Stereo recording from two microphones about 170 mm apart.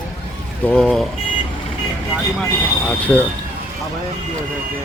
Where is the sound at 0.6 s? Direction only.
5° left (ahead or behind).